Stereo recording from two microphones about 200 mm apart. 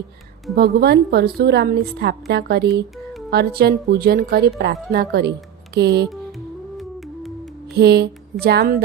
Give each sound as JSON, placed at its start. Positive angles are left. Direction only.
{"t": 0.5, "sound": "a woman's voice", "side_deg": -50}
{"t": 5.7, "sound": "music", "side_deg": -55}
{"t": 7.7, "sound": "speech", "side_deg": -55}